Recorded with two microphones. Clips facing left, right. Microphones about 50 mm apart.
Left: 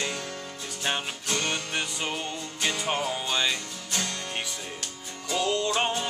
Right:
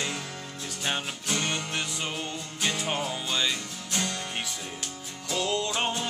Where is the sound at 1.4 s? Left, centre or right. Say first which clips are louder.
Left 2 dB; centre.